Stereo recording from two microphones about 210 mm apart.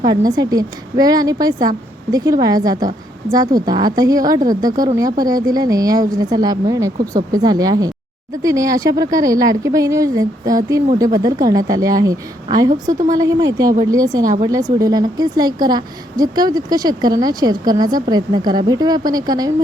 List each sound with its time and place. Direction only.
0.0 s a woman's voice: 20° right (ahead or behind)